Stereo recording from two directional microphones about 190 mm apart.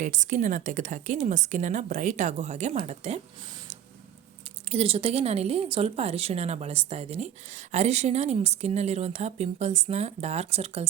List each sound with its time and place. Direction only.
0.0 s speech: 40° right (ahead or behind)
4.7 s speech: 30° right (ahead or behind)